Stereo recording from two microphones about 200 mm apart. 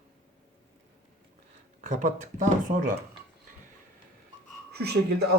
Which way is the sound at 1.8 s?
35° right (ahead or behind).